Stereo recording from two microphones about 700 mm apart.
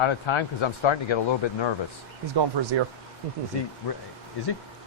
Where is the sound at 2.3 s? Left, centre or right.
Right.